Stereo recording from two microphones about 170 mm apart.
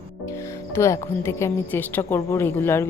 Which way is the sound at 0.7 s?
15° left (ahead or behind).